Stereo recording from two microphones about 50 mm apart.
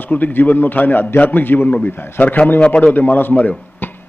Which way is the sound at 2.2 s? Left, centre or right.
Left.